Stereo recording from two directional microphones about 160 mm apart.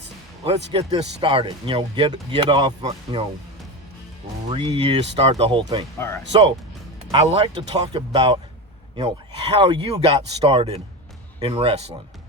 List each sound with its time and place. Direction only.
0.4 s speech: 40° right (ahead or behind)
4.4 s speech: 30° right (ahead or behind)
6.0 s speech: 15° left (ahead or behind)
7.1 s speech: 40° right (ahead or behind)